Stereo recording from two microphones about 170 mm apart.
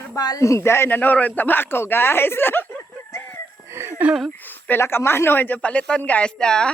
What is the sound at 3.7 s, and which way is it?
Speech, 15° right (ahead or behind).